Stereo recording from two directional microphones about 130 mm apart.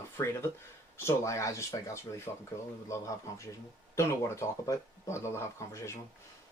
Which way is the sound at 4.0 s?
20° left (ahead or behind).